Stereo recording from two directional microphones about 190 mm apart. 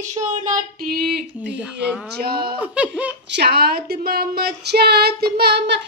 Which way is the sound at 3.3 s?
60° right (ahead or behind).